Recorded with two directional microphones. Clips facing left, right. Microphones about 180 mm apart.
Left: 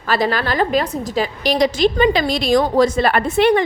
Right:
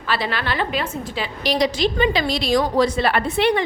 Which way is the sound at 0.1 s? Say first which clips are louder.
Left 5 dB; 45° left (ahead or behind).